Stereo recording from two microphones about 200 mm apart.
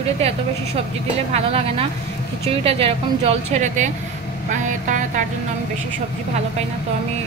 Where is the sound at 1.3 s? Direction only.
30° right (ahead or behind).